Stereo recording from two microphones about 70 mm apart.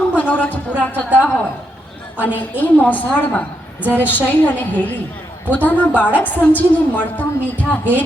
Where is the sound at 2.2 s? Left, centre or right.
Left.